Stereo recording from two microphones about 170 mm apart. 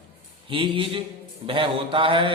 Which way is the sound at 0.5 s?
30° right (ahead or behind).